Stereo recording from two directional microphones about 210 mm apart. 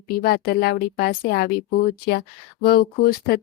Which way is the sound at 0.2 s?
45° left (ahead or behind).